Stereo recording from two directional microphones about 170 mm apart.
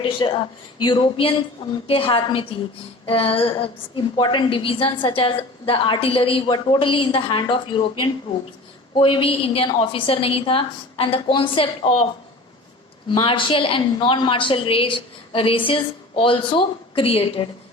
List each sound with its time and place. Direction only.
0.0 s a woman's voice: 30° left (ahead or behind)
13.1 s a woman's voice: 30° left (ahead or behind)